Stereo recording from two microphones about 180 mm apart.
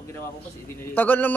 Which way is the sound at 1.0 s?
10° left (ahead or behind).